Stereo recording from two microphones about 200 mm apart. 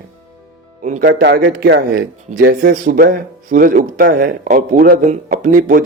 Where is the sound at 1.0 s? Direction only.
55° right (ahead or behind).